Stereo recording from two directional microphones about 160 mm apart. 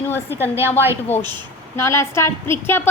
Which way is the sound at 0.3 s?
15° right (ahead or behind).